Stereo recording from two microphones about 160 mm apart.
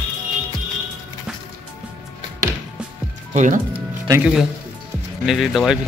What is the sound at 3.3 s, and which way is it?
Speech, 50° right (ahead or behind).